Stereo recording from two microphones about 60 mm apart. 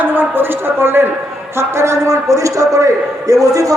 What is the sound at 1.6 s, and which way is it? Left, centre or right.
A man's voice, right.